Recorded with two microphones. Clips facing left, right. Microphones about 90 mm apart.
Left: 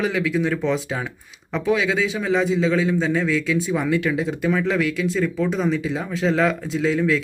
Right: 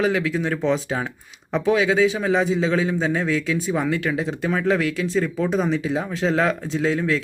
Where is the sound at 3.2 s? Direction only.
40° right (ahead or behind).